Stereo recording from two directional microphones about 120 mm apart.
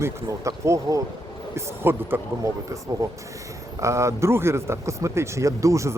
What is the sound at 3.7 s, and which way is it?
Speech, 25° right (ahead or behind).